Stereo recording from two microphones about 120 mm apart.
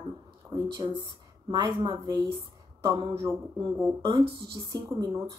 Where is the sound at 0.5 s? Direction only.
30° right (ahead or behind).